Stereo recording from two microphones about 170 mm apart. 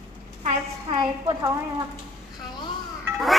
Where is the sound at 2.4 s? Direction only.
25° left (ahead or behind).